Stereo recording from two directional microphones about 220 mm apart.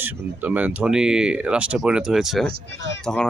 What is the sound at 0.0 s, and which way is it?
Speech, 10° right (ahead or behind).